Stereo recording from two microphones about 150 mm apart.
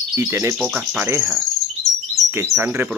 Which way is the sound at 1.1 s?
15° right (ahead or behind).